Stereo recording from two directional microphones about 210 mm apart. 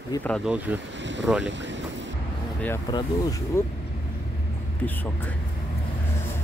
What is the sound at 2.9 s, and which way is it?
Speech, 20° left (ahead or behind).